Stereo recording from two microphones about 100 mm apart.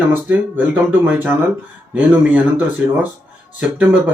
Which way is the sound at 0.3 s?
15° right (ahead or behind).